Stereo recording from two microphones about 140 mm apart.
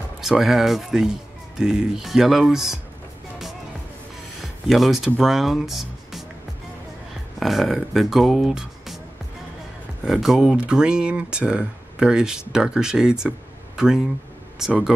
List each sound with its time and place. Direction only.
0.2 s speech: centre (ahead or behind)
4.4 s speech: centre (ahead or behind)
7.3 s speech: centre (ahead or behind)
10.0 s speech: 5° right (ahead or behind)